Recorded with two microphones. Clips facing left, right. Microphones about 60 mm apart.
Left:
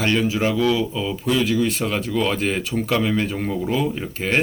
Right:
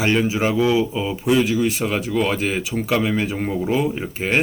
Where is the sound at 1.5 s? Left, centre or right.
Centre.